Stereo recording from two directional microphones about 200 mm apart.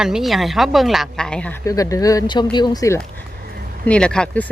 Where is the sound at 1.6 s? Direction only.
15° left (ahead or behind).